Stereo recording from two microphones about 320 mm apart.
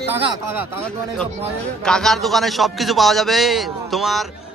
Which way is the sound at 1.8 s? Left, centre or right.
Centre.